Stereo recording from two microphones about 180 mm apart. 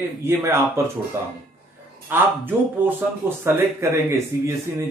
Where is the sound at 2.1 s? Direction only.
10° right (ahead or behind).